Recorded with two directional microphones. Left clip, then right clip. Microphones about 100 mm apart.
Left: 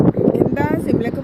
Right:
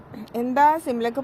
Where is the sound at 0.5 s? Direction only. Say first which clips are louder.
Right 1 dB; 30° left (ahead or behind).